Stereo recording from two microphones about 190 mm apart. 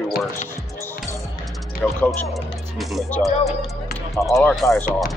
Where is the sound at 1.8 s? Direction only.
10° left (ahead or behind).